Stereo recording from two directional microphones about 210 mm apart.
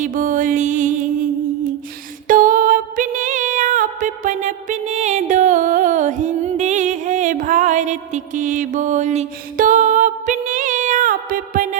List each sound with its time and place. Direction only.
0.0 s music: 40° right (ahead or behind)